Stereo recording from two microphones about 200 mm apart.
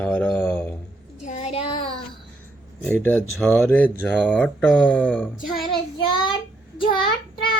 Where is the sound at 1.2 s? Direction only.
35° left (ahead or behind).